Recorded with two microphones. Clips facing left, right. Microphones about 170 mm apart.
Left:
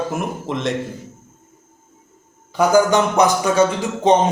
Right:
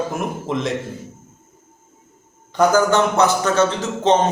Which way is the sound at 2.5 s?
15° left (ahead or behind).